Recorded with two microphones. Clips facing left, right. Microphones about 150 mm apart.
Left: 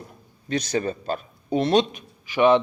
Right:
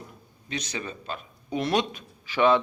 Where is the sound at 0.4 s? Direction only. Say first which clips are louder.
Left 9 dB; 40° left (ahead or behind).